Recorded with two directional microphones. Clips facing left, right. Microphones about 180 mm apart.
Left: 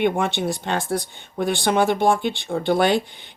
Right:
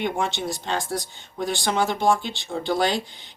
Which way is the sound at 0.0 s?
55° left (ahead or behind).